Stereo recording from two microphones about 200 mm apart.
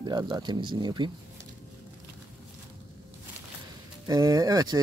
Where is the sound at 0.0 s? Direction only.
20° right (ahead or behind).